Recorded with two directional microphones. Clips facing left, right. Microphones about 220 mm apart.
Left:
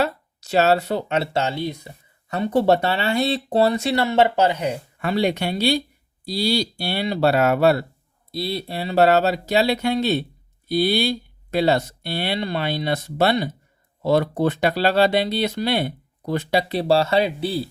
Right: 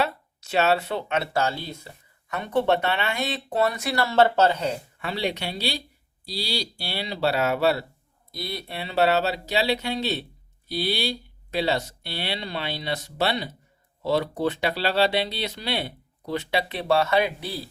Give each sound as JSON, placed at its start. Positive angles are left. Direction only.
{"t": 0.0, "sound": "speech", "side_deg": 40}
{"t": 2.3, "sound": "speech", "side_deg": 35}
{"t": 4.9, "sound": "speech", "side_deg": 50}
{"t": 8.3, "sound": "speech", "side_deg": 30}